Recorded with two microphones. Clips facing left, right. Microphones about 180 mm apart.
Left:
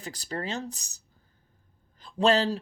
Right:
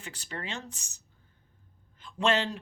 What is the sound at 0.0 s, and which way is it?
A man's voice, 40° left (ahead or behind).